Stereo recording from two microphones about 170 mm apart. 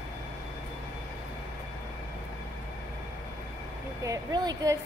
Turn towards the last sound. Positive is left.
turn(degrees=-20)  # may be behind; listen again after turning